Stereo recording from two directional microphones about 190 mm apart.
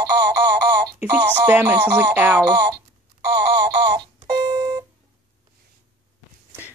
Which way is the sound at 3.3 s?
60° right (ahead or behind).